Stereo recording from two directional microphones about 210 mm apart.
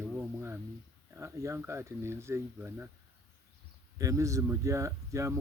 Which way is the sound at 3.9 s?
15° right (ahead or behind).